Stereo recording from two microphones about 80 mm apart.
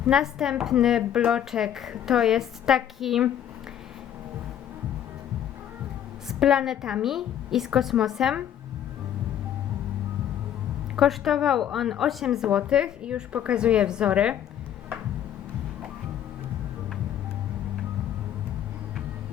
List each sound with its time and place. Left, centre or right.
0.0 s a woman's voice: centre
6.2 s a woman's voice: centre
10.9 s a woman's voice: centre